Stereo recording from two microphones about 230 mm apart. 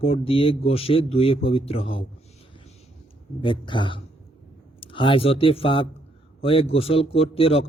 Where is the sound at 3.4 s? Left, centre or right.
Left.